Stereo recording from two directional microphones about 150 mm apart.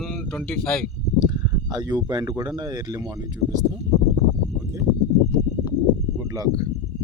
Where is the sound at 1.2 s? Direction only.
25° right (ahead or behind).